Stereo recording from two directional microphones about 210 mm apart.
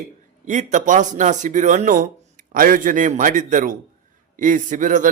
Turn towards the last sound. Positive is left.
turn(degrees=-40)  # may be behind; listen again after turning